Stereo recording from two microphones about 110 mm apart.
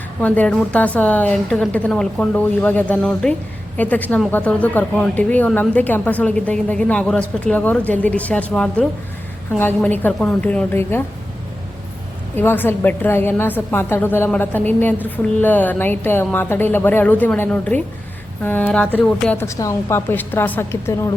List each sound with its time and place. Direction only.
0.2 s a woman's voice: 15° left (ahead or behind)
12.4 s a woman's voice: 20° left (ahead or behind)
19.5 s a woman's voice: 30° left (ahead or behind)